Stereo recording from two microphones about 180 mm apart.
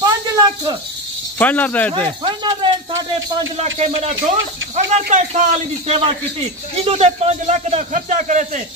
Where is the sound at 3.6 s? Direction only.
35° right (ahead or behind).